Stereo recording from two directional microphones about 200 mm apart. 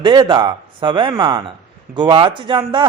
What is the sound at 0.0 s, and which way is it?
A man's voice, 25° right (ahead or behind).